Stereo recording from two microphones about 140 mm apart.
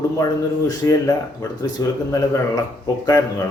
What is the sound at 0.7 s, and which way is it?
Speech, 25° left (ahead or behind).